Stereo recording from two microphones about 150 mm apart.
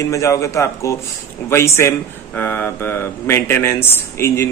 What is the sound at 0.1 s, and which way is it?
Speech, 20° left (ahead or behind).